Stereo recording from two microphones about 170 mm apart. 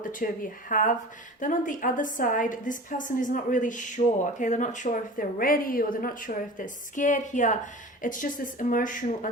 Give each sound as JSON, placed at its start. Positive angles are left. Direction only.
{"t": 0.2, "sound": "a woman's voice", "side_deg": 55}